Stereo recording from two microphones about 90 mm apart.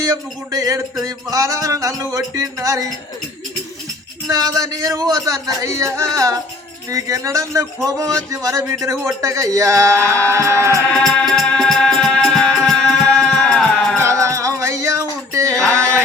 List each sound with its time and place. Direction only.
0.0 s speech: 40° right (ahead or behind)
4.3 s speech: 40° right (ahead or behind)
10.9 s music: 5° left (ahead or behind)
14.0 s music: 35° right (ahead or behind)
15.3 s a sound: 35° right (ahead or behind)